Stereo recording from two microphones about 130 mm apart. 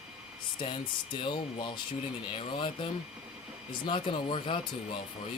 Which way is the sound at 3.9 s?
40° left (ahead or behind).